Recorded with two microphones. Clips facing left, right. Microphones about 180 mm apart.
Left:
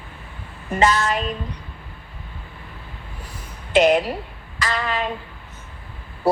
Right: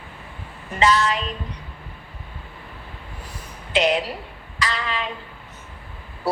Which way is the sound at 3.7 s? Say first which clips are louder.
Left 5 dB; 50° left (ahead or behind).